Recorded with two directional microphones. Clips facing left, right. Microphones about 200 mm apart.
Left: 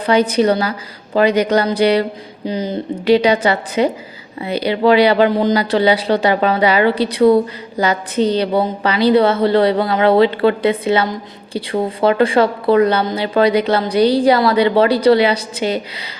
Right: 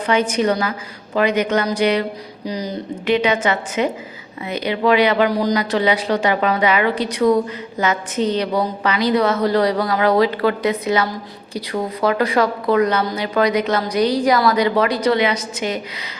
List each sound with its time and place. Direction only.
0.0 s a woman's voice: 35° left (ahead or behind)